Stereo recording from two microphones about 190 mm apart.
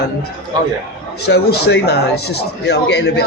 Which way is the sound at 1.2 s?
60° left (ahead or behind).